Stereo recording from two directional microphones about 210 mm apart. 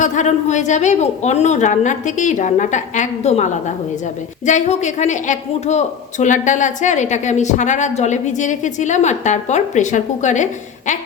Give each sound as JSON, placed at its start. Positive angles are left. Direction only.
{"t": 0.0, "sound": "a woman's voice", "side_deg": 35}